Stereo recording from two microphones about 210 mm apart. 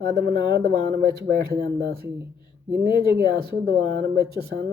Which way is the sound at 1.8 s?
45° right (ahead or behind).